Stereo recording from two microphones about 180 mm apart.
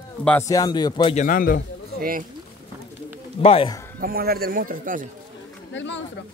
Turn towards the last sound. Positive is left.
turn(degrees=90)